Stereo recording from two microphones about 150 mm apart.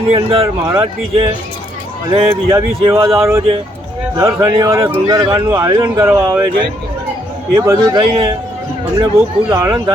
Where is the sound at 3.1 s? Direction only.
15° right (ahead or behind).